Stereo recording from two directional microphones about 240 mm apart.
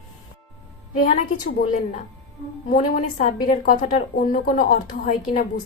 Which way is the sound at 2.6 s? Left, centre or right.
Left.